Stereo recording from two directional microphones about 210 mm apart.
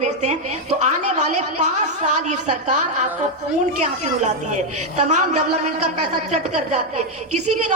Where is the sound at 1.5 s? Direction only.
35° right (ahead or behind).